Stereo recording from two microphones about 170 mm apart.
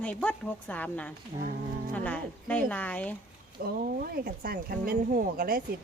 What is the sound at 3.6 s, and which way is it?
Speech, 65° right (ahead or behind).